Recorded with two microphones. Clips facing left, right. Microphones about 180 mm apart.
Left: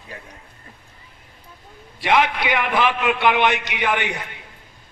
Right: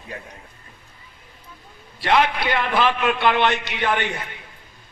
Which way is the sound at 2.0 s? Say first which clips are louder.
Even; 15° left (ahead or behind).